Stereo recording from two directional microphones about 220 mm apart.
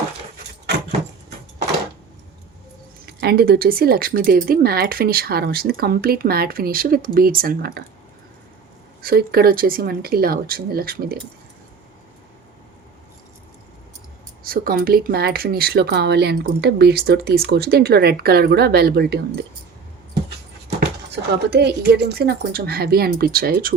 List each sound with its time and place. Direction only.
3.1 s speech: 45° right (ahead or behind)
9.0 s speech: 45° right (ahead or behind)
14.4 s speech: 40° right (ahead or behind)
21.5 s speech: 45° right (ahead or behind)